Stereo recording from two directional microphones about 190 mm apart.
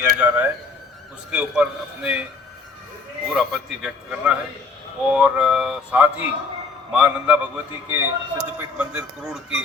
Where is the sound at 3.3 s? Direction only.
Centre (ahead or behind).